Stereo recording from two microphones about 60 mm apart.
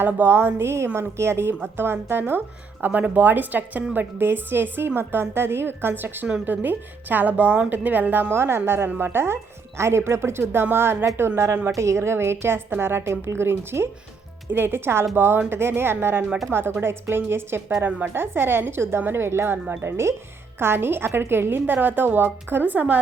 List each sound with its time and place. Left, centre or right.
0.0 s a woman's voice: right
11.8 s a woman's voice: right